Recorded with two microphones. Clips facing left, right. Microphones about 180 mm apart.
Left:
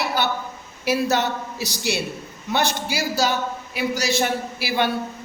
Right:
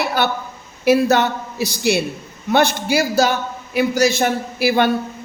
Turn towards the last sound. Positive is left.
turn(degrees=-50)  # may be behind; listen again after turning